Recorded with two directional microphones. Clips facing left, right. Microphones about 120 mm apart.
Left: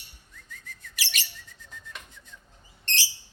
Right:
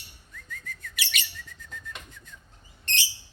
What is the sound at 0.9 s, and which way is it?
Chirp, 35° left (ahead or behind).